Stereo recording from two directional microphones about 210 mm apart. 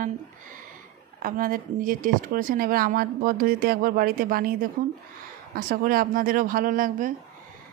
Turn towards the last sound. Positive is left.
turn(degrees=-40)  # may be behind; listen again after turning